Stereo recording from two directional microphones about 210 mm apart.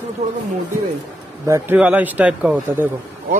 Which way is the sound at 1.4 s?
10° right (ahead or behind).